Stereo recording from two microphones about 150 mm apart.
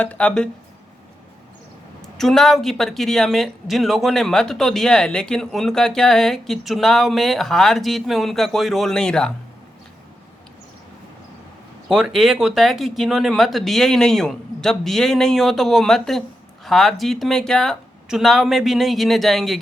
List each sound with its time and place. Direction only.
0.0 s speech: 10° left (ahead or behind)
2.1 s speech: 5° left (ahead or behind)
11.9 s speech: 5° right (ahead or behind)